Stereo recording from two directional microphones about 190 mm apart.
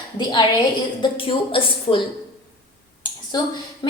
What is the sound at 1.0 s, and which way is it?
A woman's voice, 25° left (ahead or behind).